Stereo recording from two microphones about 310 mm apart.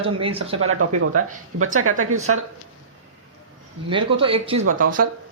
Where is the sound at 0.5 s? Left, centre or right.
Right.